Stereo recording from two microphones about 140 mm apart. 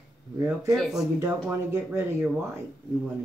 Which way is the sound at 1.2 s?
20° right (ahead or behind).